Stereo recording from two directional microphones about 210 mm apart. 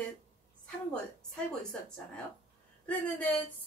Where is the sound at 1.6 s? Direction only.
5° left (ahead or behind).